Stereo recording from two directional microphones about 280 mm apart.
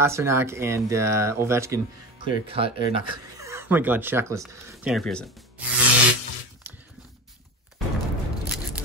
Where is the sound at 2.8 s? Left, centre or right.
Left.